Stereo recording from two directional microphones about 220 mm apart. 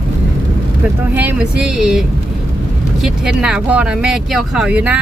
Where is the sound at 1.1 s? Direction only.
10° right (ahead or behind).